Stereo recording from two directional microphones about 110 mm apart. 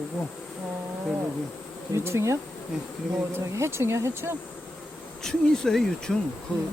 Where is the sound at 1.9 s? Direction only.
25° right (ahead or behind).